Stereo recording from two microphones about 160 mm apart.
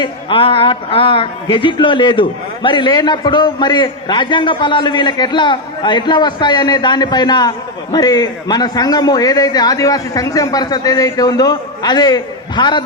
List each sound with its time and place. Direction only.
0.0 s a man's voice: 35° left (ahead or behind)